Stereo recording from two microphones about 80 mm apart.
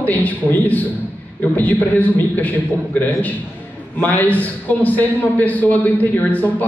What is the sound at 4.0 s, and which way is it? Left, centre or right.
A man's voice, left.